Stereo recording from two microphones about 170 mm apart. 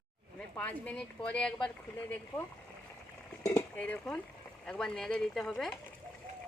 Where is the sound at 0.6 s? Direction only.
10° left (ahead or behind).